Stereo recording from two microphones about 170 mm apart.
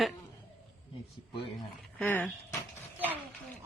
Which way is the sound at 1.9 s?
10° left (ahead or behind).